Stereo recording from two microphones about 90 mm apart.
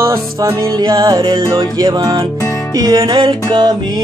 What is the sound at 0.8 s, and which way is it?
Music, 55° right (ahead or behind).